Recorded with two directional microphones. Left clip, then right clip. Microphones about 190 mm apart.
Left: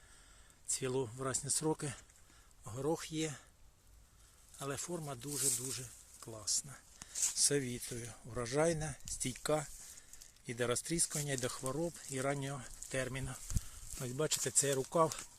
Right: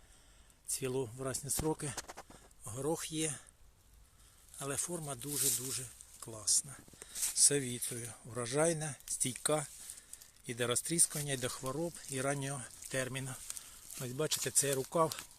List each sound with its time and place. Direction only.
0.7 s speech: 10° right (ahead or behind)
4.5 s speech: centre (ahead or behind)